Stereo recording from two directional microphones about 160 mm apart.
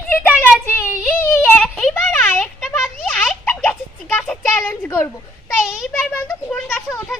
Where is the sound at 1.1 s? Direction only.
10° left (ahead or behind).